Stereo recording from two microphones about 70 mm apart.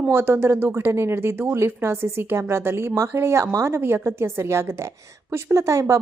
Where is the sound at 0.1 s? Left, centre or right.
Right.